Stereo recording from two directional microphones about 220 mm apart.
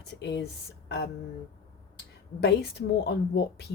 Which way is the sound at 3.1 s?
50° left (ahead or behind).